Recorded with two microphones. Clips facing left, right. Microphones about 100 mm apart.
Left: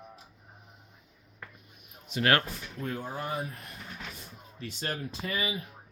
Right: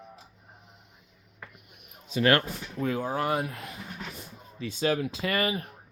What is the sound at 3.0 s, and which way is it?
Speech, 90° right.